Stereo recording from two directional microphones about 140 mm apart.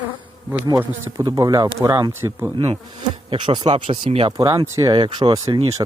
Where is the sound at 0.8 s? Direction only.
20° right (ahead or behind).